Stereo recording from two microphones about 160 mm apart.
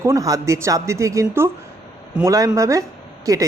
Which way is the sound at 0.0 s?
20° right (ahead or behind).